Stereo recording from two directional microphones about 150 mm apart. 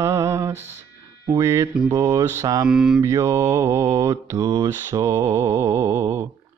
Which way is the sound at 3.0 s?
20° right (ahead or behind).